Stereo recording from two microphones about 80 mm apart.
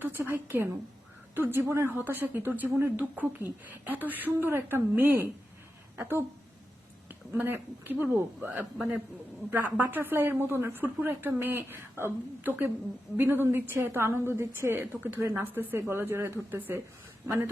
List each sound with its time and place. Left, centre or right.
0.0 s a woman's voice: right